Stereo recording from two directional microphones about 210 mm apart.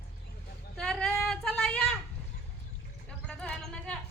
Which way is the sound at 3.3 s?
5° left (ahead or behind).